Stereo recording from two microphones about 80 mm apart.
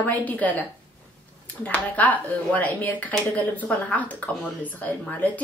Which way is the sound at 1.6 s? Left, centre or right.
Centre.